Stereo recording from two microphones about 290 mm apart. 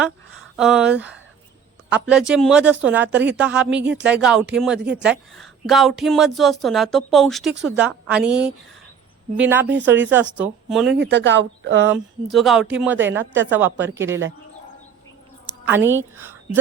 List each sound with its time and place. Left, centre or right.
0.5 s a woman's voice: centre
9.7 s speech: right
10.1 s speech: centre
10.9 s speech: right
11.9 s a woman's voice: centre
14.1 s speech: right
15.6 s a woman's voice: centre